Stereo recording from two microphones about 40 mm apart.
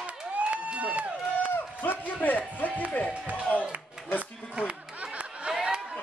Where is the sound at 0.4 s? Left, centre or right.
Right.